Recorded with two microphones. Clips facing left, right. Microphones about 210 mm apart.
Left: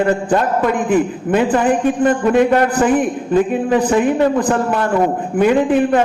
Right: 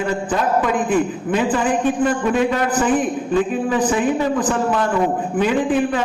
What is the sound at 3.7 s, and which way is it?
A man's voice, 60° left (ahead or behind).